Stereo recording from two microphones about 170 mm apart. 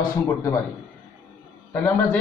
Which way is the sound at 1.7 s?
10° left (ahead or behind).